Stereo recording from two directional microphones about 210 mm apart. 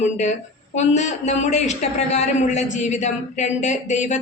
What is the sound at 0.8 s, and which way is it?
A man's voice, 35° left (ahead or behind).